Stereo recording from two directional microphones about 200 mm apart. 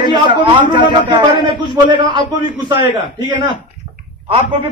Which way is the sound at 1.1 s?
25° right (ahead or behind).